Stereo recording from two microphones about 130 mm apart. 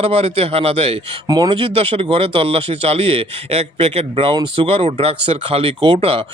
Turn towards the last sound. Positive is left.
turn(degrees=-45)  # may be behind; listen again after turning